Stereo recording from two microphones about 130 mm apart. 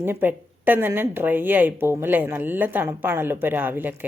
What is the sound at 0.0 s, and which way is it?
Speech, 15° right (ahead or behind).